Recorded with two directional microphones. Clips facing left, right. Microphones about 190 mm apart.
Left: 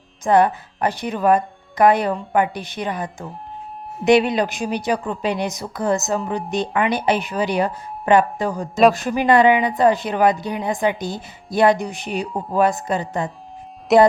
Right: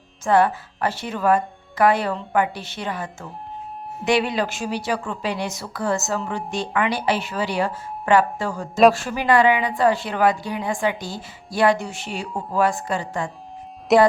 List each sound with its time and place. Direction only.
0.3 s a woman's voice: 20° left (ahead or behind)
13.9 s speech: centre (ahead or behind)